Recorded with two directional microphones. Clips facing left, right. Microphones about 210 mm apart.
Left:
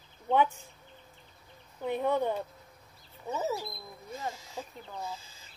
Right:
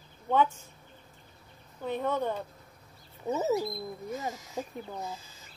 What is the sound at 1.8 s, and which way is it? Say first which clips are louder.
Speech: left 1 dB; 15° left (ahead or behind).